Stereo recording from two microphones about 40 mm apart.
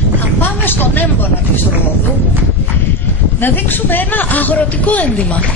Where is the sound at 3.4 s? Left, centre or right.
Left.